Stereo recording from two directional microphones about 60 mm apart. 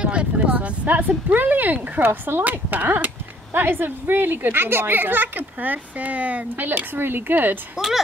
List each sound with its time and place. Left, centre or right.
0.0 s speech: centre; by 7.5 s right
7.7 s speech: centre